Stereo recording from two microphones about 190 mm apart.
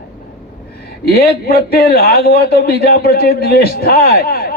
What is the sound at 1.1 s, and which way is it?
A man's voice, 55° left (ahead or behind).